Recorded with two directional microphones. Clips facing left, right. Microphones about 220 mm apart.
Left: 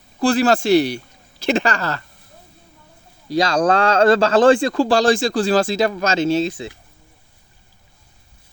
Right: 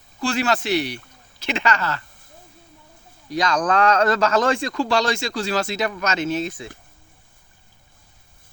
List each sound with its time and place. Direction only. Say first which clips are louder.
0.2 s a man's voice: left 6 dB; 35° left (ahead or behind)
3.2 s a man's voice: left 5 dB; 30° left (ahead or behind)